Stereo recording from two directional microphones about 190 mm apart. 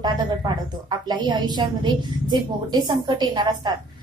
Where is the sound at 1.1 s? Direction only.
20° right (ahead or behind).